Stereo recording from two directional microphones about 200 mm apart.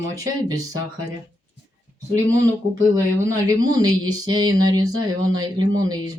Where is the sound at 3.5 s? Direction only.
20° right (ahead or behind).